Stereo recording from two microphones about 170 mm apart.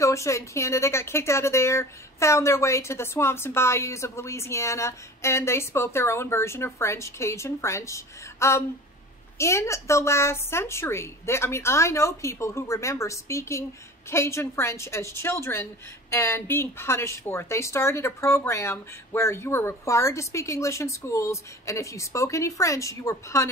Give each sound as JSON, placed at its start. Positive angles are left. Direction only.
{"t": 0.0, "sound": "a woman's voice", "side_deg": 15}